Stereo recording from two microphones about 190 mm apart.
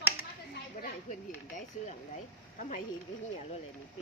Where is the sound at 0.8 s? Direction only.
40° left (ahead or behind).